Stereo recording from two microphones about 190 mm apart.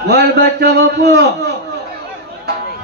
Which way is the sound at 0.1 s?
60° right (ahead or behind).